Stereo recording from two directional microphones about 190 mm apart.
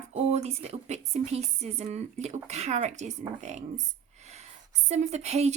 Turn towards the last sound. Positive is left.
turn(degrees=-35)  # may be behind; listen again after turning